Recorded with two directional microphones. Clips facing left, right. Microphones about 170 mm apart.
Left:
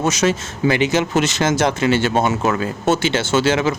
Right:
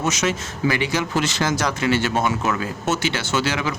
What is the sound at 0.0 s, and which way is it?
Speech, 30° left (ahead or behind).